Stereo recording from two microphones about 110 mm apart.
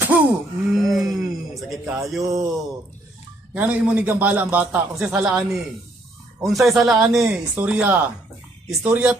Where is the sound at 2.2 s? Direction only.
35° right (ahead or behind).